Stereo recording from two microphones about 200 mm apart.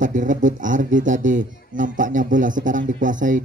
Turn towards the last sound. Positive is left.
turn(degrees=-40)  # may be behind; listen again after turning